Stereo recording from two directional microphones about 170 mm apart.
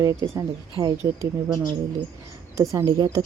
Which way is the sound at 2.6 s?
20° right (ahead or behind).